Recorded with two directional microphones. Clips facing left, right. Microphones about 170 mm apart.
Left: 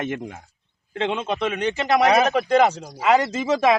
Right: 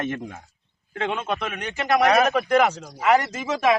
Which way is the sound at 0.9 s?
20° left (ahead or behind).